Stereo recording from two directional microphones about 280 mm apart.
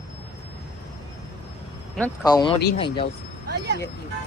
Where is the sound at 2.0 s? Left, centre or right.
Centre.